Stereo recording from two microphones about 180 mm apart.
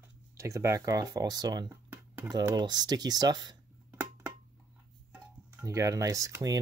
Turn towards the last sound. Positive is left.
turn(degrees=-20)  # may be behind; listen again after turning